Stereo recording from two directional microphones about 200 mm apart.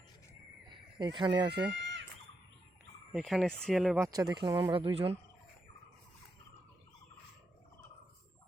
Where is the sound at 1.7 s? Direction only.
65° right (ahead or behind).